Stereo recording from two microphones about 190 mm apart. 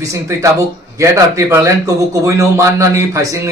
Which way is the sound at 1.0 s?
15° right (ahead or behind).